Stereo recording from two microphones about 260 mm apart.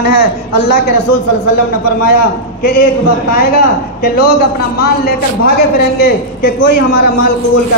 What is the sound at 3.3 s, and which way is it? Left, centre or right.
Speech, left.